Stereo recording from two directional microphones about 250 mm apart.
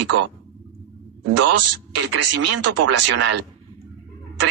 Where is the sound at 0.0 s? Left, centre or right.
Right.